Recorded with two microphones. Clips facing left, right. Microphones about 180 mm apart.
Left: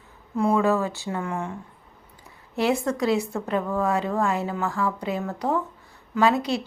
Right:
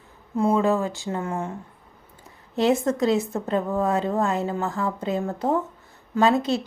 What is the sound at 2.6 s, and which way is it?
Speech, 20° right (ahead or behind).